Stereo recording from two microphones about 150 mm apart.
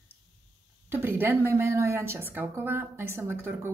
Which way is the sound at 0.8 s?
15° right (ahead or behind).